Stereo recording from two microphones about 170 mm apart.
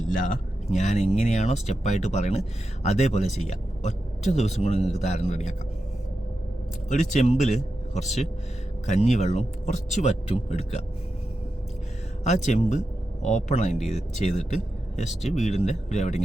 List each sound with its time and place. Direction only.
0.1 s a man's voice: 50° left (ahead or behind)
6.9 s speech: 45° left (ahead or behind)
12.2 s speech: 45° left (ahead or behind)